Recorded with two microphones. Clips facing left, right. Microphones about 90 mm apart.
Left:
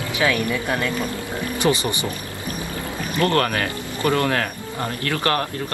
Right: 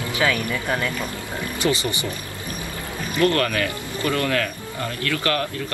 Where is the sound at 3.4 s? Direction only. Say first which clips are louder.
Even; 35° left (ahead or behind).